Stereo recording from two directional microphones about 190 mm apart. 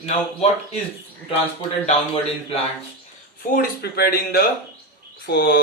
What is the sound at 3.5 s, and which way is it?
Speech, 50° left (ahead or behind).